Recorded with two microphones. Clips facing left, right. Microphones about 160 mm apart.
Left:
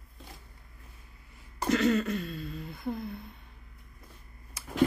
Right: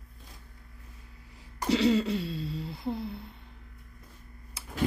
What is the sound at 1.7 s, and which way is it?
Throat clearing, 10° right (ahead or behind).